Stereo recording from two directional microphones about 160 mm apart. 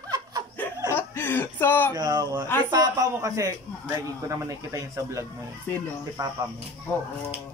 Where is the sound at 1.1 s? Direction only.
15° left (ahead or behind).